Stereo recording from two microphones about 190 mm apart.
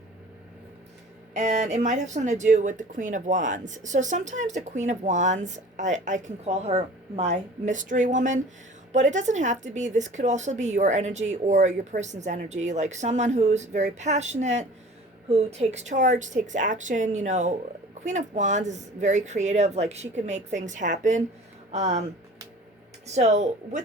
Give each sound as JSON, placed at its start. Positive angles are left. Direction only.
{"t": 1.3, "sound": "speech", "side_deg": -40}
{"t": 23.0, "sound": "speech", "side_deg": -35}